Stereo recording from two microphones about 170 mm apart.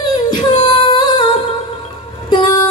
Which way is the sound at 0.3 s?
25° left (ahead or behind).